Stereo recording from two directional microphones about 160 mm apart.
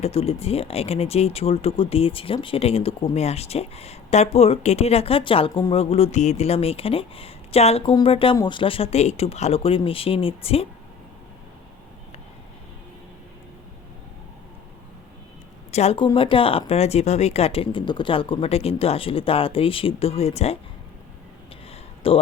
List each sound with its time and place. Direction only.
0.0 s speech: 35° left (ahead or behind)
15.7 s speech: 40° left (ahead or behind)
22.0 s speech: 35° left (ahead or behind)